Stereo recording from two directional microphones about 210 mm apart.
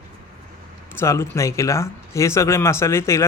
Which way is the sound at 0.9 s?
10° left (ahead or behind).